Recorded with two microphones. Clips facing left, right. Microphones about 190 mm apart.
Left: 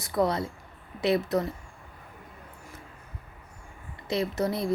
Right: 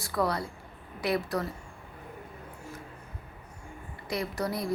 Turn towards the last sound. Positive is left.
turn(degrees=25)  # may be behind; listen again after turning